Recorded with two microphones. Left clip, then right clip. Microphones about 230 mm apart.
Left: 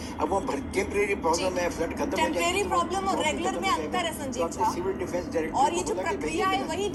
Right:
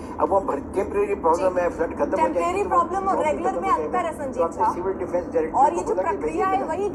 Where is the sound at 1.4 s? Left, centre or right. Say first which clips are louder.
Right 6 dB; left.